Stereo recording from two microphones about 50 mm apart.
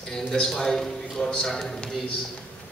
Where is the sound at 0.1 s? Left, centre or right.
Centre.